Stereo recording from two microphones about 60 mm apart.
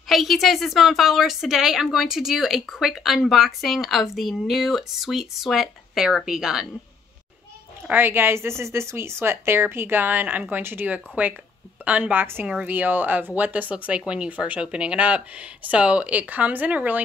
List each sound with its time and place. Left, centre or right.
0.1 s a woman's voice: centre
7.9 s speech: right
13.8 s speech: centre